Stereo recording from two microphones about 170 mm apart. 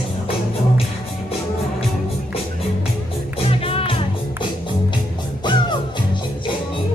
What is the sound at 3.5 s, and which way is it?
Music, 35° left (ahead or behind).